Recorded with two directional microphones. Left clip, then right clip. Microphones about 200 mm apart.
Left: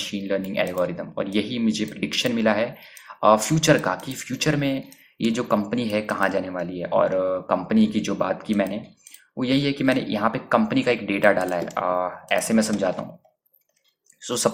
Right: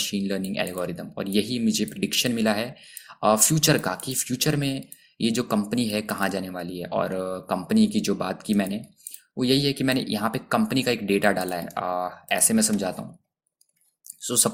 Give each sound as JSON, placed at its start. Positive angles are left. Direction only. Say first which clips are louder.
{"t": 0.0, "sound": "speech", "louder": "left 2 dB", "side_deg": -40}
{"t": 14.2, "sound": "speech", "louder": "left 3 dB", "side_deg": -35}